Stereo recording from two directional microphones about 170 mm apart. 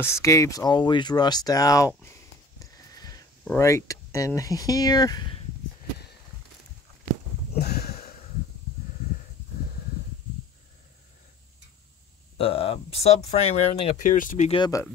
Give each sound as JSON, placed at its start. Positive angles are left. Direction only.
{"t": 0.0, "sound": "speech", "side_deg": 15}
{"t": 2.0, "sound": "sniff", "side_deg": 20}
{"t": 3.4, "sound": "speech", "side_deg": 15}
{"t": 7.5, "sound": "a sound", "side_deg": 70}
{"t": 12.4, "sound": "speech", "side_deg": 35}
{"t": 14.5, "sound": "speech", "side_deg": 25}